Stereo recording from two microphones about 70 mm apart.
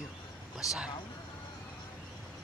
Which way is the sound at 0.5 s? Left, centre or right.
Centre.